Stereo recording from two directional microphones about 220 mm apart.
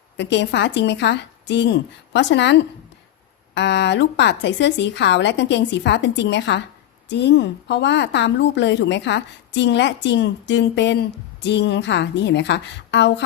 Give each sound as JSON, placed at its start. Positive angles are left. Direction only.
{"t": 0.2, "sound": "a woman's voice", "side_deg": 50}